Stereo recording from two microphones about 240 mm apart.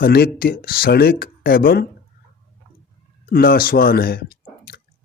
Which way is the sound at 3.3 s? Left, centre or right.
Left.